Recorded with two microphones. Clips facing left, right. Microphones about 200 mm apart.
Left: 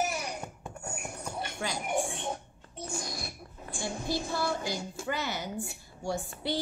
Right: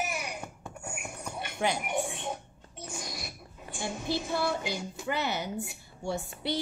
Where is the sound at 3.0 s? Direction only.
20° right (ahead or behind).